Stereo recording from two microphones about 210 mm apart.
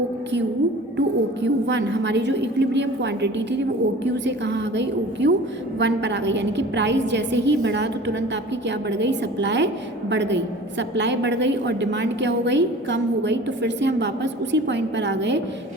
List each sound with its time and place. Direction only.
0.9 s a woman's voice: 55° right (ahead or behind)